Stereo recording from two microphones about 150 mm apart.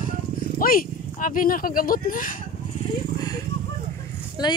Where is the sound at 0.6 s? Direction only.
70° left (ahead or behind).